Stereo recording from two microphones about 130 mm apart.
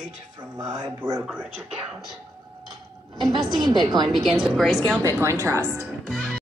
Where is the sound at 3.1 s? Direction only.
35° right (ahead or behind).